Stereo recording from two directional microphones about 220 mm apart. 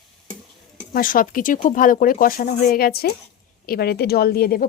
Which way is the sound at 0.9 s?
40° left (ahead or behind).